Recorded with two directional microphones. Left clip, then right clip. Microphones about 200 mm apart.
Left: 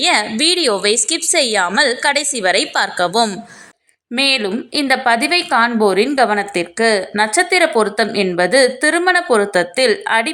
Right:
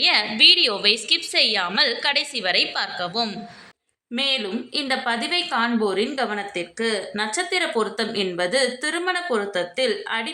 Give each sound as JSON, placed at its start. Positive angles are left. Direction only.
{"t": 0.0, "sound": "a woman's voice", "side_deg": 40}